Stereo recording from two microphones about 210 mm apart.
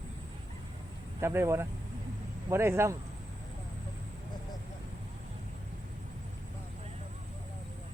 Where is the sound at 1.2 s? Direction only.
10° right (ahead or behind).